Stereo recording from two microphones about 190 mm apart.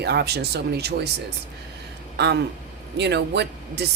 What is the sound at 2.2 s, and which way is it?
Speech, 60° right (ahead or behind).